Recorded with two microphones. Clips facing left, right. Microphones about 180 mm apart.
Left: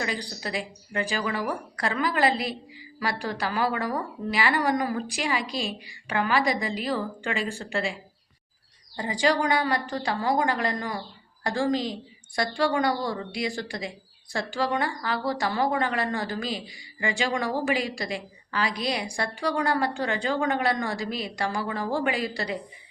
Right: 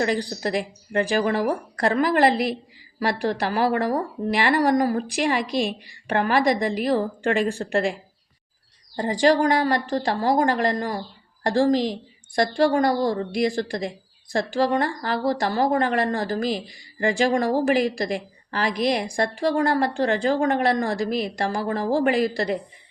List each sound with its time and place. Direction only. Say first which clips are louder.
0.0 s a woman's voice: right 8 dB; 50° right (ahead or behind)
9.0 s a woman's voice: right 6 dB; 45° right (ahead or behind)
12.4 s a woman's voice: right 5 dB; 45° right (ahead or behind)